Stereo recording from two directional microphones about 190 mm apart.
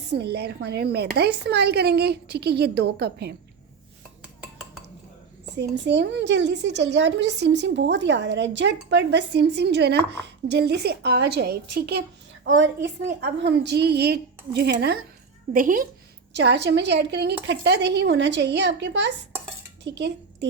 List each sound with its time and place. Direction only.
0.1 s a woman's voice: 60° right (ahead or behind)
4.2 s dishes: centre (ahead or behind)
5.7 s a woman's voice: 65° right (ahead or behind)
12.5 s a woman's voice: 75° right (ahead or behind)
13.2 s a woman's voice: 60° right (ahead or behind)
15.5 s speech: 45° right (ahead or behind)
16.3 s a woman's voice: 65° right (ahead or behind)